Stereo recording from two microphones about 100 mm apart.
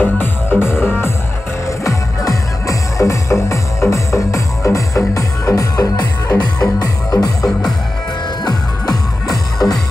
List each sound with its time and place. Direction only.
0.0 s music: 20° left (ahead or behind)
1.9 s music: 35° left (ahead or behind)
8.5 s music: 40° left (ahead or behind)